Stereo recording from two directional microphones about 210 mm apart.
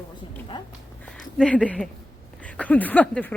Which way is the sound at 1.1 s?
5° left (ahead or behind).